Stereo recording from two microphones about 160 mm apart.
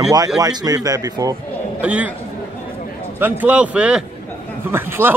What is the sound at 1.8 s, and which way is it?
Speech, 10° right (ahead or behind).